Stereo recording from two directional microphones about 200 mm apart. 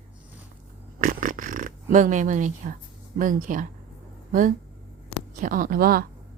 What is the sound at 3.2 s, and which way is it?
A woman's voice, 40° right (ahead or behind).